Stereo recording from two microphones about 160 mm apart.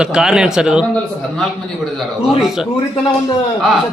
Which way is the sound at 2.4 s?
Centre (ahead or behind).